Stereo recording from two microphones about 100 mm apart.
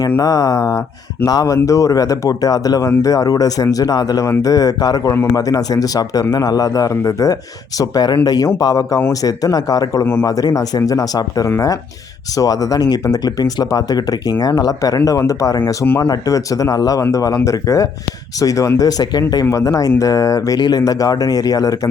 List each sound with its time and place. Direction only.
0.2 s speech: 35° left (ahead or behind)
5.1 s a man's voice: 25° left (ahead or behind)
5.4 s speech: 40° left (ahead or behind)